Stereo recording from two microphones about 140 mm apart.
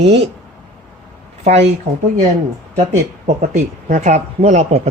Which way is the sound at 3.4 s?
55° right (ahead or behind).